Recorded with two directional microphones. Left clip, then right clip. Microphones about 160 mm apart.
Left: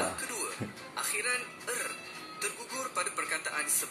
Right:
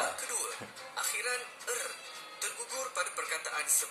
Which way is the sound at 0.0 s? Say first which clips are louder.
Left 1 dB; 20° right (ahead or behind).